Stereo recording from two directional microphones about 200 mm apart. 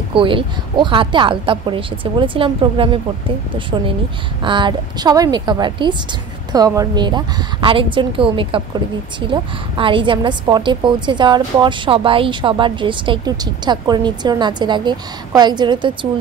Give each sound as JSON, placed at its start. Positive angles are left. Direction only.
{"t": 0.1, "sound": "a woman's voice", "side_deg": -25}
{"t": 4.4, "sound": "a woman's voice", "side_deg": -25}